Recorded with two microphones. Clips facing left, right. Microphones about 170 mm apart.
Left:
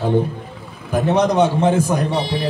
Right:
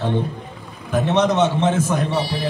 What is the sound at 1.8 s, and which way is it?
Speech, 15° left (ahead or behind).